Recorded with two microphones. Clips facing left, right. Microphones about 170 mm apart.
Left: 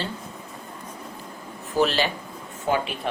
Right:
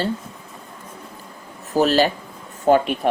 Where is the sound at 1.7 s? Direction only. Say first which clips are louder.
Right 5 dB; 40° right (ahead or behind).